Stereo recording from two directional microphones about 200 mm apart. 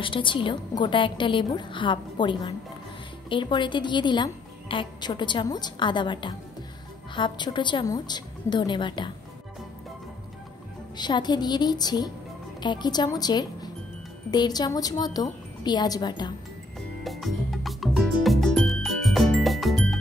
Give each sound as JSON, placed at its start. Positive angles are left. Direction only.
{"t": 0.0, "sound": "a woman's voice", "side_deg": 25}
{"t": 11.0, "sound": "a woman's voice", "side_deg": 20}
{"t": 17.0, "sound": "music", "side_deg": 0}